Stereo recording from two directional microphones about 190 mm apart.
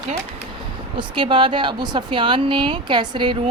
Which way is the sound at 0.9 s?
25° right (ahead or behind).